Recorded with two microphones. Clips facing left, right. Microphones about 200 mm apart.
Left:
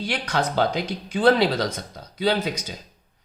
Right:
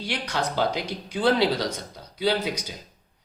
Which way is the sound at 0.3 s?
55° left (ahead or behind).